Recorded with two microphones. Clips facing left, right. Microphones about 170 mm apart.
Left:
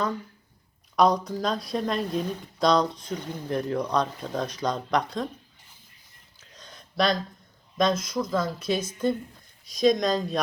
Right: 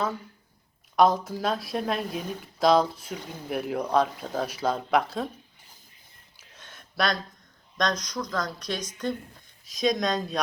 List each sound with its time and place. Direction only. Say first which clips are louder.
0.9 s speech: even; centre (ahead or behind)
6.4 s a sound: left 2 dB; 5° right (ahead or behind)
7.8 s speech: left 4 dB; 5° left (ahead or behind)